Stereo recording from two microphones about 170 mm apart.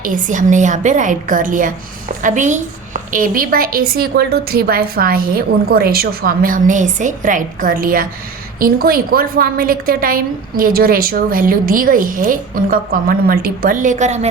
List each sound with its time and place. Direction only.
0.0 s a woman's voice: 50° right (ahead or behind)